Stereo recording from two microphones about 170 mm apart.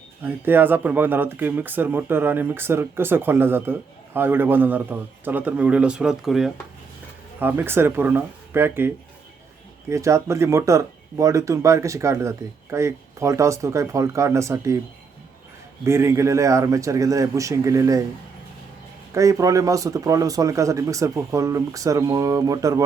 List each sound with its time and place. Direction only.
0.3 s speech: 10° right (ahead or behind)
9.9 s speech: 15° right (ahead or behind)
15.8 s speech: 15° right (ahead or behind)
19.1 s speech: 20° right (ahead or behind)